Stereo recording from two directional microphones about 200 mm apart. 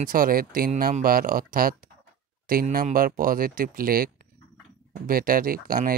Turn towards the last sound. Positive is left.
turn(degrees=-45)  # may be behind; listen again after turning